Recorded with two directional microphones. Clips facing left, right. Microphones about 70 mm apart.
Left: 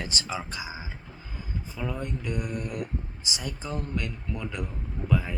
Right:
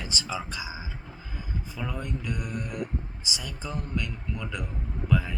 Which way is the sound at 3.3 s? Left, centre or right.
Left.